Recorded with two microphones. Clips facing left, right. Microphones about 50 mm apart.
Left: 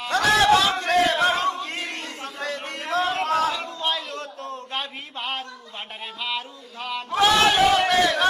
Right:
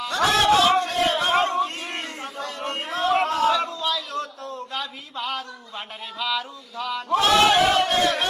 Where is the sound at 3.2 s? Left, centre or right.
Left.